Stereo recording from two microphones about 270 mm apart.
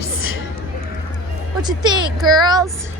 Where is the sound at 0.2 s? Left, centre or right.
Left.